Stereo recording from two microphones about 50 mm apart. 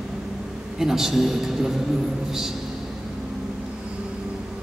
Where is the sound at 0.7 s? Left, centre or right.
Centre.